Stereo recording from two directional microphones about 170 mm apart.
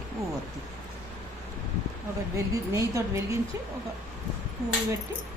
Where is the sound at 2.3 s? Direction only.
20° right (ahead or behind).